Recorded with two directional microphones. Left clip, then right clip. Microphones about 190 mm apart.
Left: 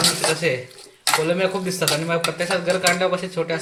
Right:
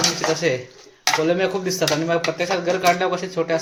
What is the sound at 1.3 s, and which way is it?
Speech, 25° right (ahead or behind).